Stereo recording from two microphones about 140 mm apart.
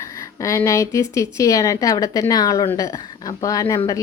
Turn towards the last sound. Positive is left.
turn(degrees=25)  # may be behind; listen again after turning